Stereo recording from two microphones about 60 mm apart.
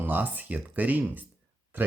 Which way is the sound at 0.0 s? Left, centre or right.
Right.